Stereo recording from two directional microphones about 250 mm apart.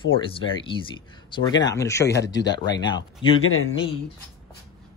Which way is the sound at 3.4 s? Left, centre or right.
Left.